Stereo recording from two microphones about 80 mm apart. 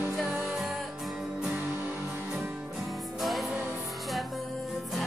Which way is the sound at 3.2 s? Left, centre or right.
Centre.